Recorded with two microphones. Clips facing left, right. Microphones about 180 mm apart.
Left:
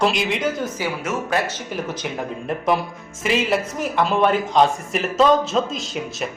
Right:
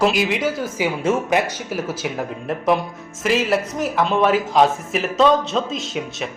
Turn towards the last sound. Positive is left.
turn(degrees=0)  # may be behind; listen again after turning